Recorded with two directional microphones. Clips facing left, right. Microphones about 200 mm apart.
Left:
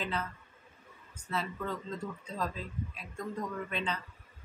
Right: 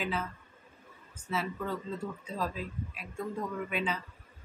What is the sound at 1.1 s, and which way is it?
Speech, 5° right (ahead or behind).